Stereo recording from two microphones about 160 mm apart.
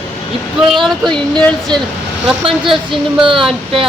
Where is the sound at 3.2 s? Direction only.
35° right (ahead or behind).